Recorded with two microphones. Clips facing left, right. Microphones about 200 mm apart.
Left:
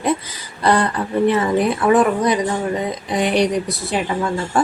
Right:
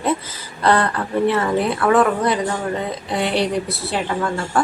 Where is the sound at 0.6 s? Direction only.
15° left (ahead or behind).